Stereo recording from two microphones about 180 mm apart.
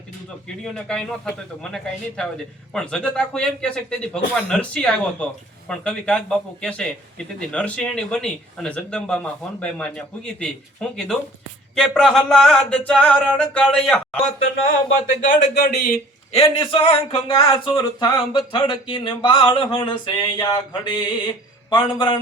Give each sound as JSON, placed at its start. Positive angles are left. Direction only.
{"t": 0.4, "sound": "speech", "side_deg": 5}
{"t": 15.2, "sound": "speech", "side_deg": 45}
{"t": 16.3, "sound": "speech", "side_deg": 30}